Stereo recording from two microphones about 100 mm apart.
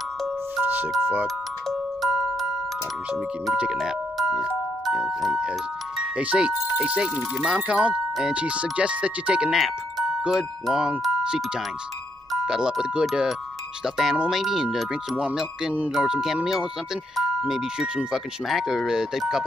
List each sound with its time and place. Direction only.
0.6 s music: 20° right (ahead or behind)
1.2 s music: centre (ahead or behind)
3.7 s speech: centre (ahead or behind)